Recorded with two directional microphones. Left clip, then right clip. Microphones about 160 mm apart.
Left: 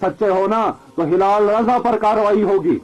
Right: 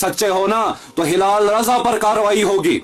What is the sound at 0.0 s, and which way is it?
Speech, 40° right (ahead or behind).